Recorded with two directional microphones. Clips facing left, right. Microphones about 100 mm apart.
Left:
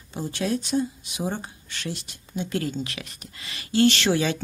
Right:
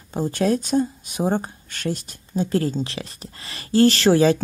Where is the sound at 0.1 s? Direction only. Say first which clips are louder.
Right 6 dB; 45° right (ahead or behind).